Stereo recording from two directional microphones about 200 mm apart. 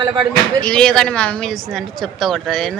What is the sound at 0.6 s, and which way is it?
A woman's voice, 5° left (ahead or behind).